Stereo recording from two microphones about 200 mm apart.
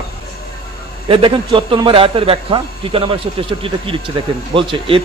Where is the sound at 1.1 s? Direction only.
25° right (ahead or behind).